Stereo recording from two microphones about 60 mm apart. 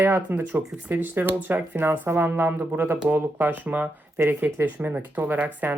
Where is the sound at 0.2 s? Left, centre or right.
Right.